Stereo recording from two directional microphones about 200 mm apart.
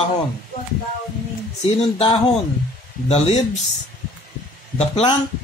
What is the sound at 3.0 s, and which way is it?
Speech, 30° left (ahead or behind).